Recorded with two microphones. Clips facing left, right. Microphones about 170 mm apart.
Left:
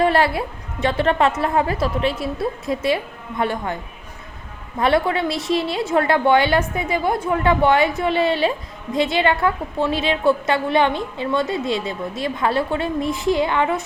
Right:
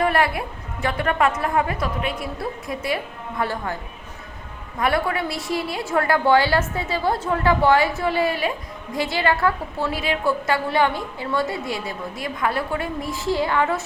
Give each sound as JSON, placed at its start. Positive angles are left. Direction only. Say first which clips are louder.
{"t": 0.0, "sound": "a woman's voice", "louder": "left 3 dB", "side_deg": 30}
{"t": 4.8, "sound": "a woman's voice", "louder": "left 4 dB", "side_deg": 25}